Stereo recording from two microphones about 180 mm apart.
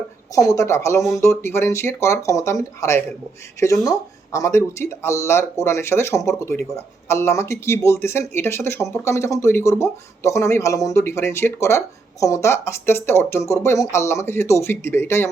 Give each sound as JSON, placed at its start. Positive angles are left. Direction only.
{"t": 0.3, "sound": "speech", "side_deg": 20}